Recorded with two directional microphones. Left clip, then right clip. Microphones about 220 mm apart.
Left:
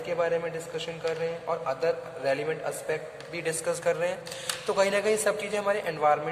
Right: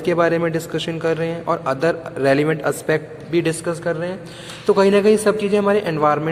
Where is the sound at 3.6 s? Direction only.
Centre (ahead or behind).